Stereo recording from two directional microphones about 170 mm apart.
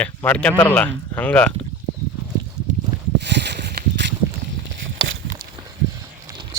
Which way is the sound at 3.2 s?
85° right.